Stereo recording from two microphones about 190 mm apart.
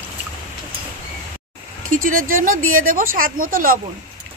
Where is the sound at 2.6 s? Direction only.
90° right.